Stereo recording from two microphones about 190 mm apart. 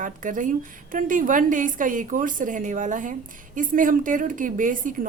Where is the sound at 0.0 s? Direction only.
45° right (ahead or behind).